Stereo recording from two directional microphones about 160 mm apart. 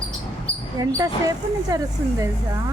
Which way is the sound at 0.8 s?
20° right (ahead or behind).